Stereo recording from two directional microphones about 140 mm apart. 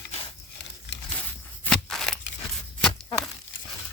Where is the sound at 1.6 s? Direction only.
5° left (ahead or behind).